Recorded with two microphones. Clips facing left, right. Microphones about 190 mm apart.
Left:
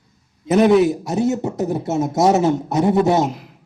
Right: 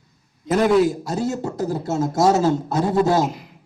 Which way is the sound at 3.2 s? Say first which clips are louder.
Left 2 dB; centre (ahead or behind).